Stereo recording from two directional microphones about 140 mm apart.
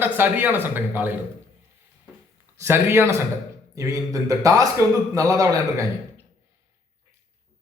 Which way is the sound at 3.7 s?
25° right (ahead or behind).